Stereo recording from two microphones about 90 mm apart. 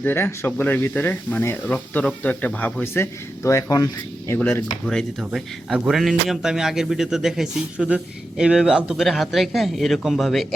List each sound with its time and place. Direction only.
0.0 s speech: 25° left (ahead or behind)
5.2 s a man's voice: 5° right (ahead or behind)